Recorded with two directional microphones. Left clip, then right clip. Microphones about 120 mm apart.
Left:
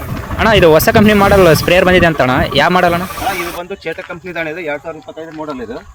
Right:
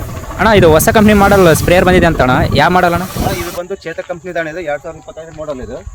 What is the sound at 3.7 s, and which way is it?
Speech, 45° right (ahead or behind).